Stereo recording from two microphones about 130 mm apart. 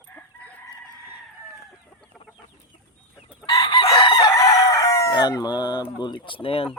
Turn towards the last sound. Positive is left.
turn(degrees=45)  # may be behind; listen again after turning